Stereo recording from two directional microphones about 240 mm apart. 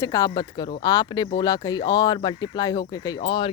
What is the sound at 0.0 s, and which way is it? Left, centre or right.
Speech, centre.